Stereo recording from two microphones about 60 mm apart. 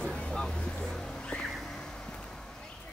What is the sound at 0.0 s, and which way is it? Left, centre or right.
Vehicle, centre.